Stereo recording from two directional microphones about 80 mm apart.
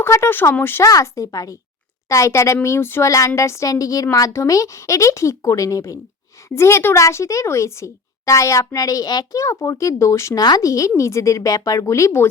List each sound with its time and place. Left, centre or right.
0.0 s speech: left
1.0 s a woman's voice: left
6.5 s a woman's voice: left
10.4 s a woman's voice: left